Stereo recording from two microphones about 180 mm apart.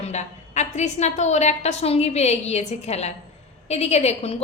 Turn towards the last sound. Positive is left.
turn(degrees=35)  # may be behind; listen again after turning